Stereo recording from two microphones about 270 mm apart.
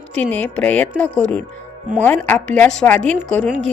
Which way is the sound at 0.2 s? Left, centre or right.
Centre.